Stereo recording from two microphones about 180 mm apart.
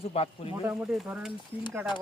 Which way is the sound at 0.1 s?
35° left (ahead or behind).